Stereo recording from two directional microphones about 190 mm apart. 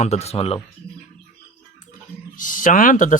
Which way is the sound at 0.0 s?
35° left (ahead or behind).